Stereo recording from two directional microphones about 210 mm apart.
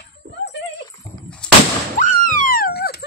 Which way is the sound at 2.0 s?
40° left (ahead or behind).